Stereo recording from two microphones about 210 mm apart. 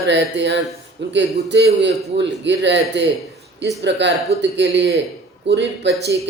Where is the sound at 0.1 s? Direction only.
55° right (ahead or behind).